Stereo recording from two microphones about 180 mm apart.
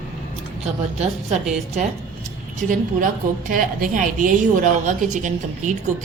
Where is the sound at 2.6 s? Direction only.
50° right (ahead or behind).